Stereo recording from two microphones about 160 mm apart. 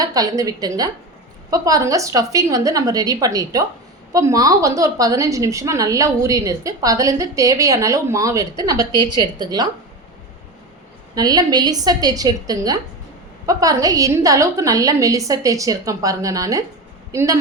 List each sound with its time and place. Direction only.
0.0 s a woman's voice: 25° right (ahead or behind)
11.1 s a woman's voice: 25° right (ahead or behind)